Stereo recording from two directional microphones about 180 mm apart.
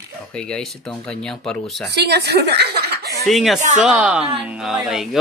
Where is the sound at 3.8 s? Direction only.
5° right (ahead or behind).